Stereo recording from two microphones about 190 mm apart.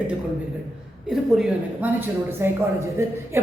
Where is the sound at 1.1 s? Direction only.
5° right (ahead or behind).